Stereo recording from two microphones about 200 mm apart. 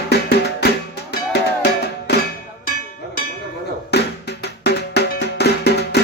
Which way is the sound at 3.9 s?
55° left (ahead or behind).